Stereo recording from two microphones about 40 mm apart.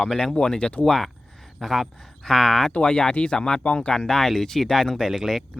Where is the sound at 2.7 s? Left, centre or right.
Left.